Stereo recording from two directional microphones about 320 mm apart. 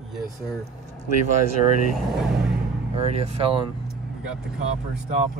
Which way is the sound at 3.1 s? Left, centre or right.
Centre.